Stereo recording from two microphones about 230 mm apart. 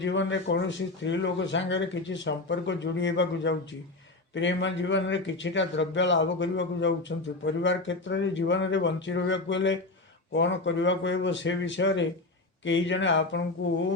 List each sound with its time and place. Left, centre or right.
0.0 s speech: left